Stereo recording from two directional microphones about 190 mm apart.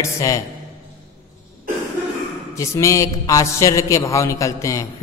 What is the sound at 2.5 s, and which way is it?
A man's voice, 15° left (ahead or behind).